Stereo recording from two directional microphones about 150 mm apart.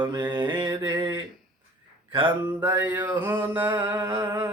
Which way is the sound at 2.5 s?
15° right (ahead or behind).